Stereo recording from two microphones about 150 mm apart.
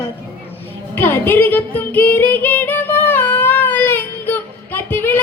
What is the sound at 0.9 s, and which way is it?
Music, 15° left (ahead or behind).